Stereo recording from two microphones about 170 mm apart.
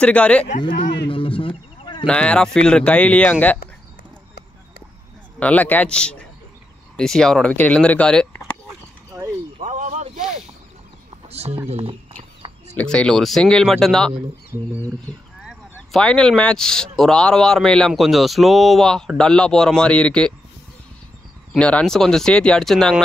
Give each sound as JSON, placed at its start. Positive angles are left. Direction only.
{"t": 0.0, "sound": "speech", "side_deg": 5}
{"t": 1.0, "sound": "speech", "side_deg": 30}
{"t": 2.0, "sound": "speech", "side_deg": 5}
{"t": 5.4, "sound": "speech", "side_deg": 10}
{"t": 9.1, "sound": "a sound", "side_deg": -15}
{"t": 9.6, "sound": "a sound", "side_deg": -45}
{"t": 11.2, "sound": "a sound", "side_deg": -40}
{"t": 12.7, "sound": "speech", "side_deg": 5}
{"t": 15.9, "sound": "speech", "side_deg": 5}
{"t": 21.5, "sound": "speech", "side_deg": 5}